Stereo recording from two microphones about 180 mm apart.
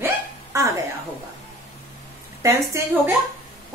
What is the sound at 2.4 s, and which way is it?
Speech, 15° right (ahead or behind).